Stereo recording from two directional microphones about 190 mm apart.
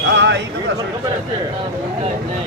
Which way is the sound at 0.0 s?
70° right (ahead or behind).